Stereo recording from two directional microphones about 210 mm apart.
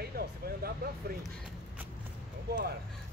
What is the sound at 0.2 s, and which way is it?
Vehicle, 45° right (ahead or behind).